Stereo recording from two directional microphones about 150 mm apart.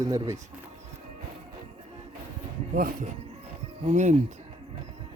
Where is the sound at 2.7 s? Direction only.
75° right (ahead or behind).